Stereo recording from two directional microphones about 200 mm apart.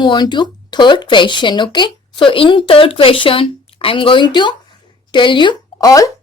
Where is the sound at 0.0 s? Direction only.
20° left (ahead or behind).